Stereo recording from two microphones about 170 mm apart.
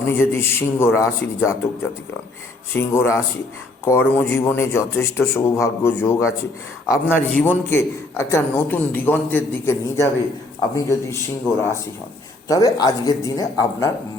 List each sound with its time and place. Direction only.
0.0 s a man's voice: 15° left (ahead or behind)
2.7 s a man's voice: 15° left (ahead or behind)
12.5 s speech: 20° left (ahead or behind)